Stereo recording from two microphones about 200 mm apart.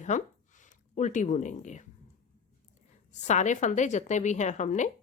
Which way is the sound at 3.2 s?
35° left (ahead or behind).